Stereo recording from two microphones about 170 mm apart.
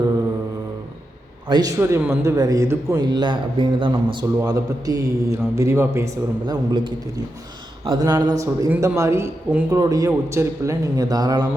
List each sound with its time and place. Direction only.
1.5 s a man's voice: 20° right (ahead or behind)